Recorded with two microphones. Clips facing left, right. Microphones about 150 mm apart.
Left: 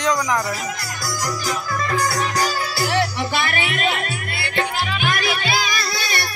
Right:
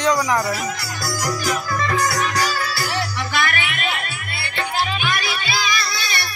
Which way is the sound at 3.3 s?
30° left (ahead or behind).